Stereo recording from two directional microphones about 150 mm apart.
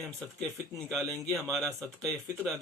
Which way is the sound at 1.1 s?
20° right (ahead or behind).